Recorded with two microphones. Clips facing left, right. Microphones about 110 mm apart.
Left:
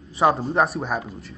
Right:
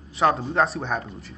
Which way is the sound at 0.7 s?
5° left (ahead or behind).